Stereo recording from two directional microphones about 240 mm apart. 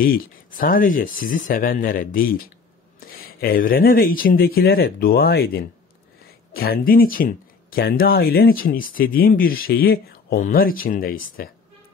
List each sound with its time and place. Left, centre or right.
0.0 s speech: left